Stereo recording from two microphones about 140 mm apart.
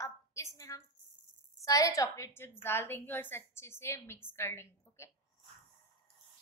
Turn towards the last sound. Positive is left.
turn(degrees=20)  # may be behind; listen again after turning